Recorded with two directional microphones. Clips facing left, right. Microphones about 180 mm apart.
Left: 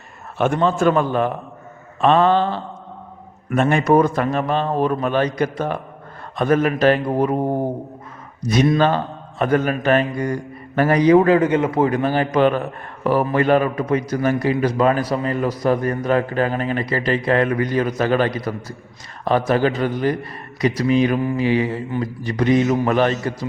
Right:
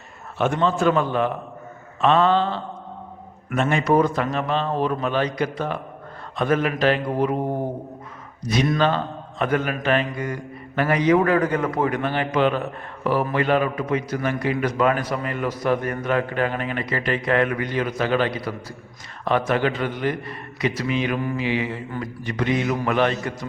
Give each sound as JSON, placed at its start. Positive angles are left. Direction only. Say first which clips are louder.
{"t": 0.3, "sound": "a man's voice", "louder": "left 3 dB", "side_deg": 50}
{"t": 3.5, "sound": "a man's voice", "louder": "left 4 dB", "side_deg": 50}
{"t": 9.4, "sound": "a man's voice", "louder": "left 4 dB", "side_deg": 40}